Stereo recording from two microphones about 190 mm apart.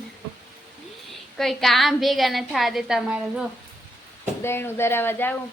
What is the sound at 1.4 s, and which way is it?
A woman's voice, centre (ahead or behind).